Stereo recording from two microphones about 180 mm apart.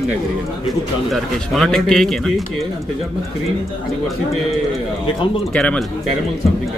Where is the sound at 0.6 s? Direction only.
Centre (ahead or behind).